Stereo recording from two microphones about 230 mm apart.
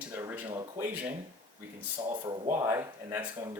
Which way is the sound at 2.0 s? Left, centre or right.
Centre.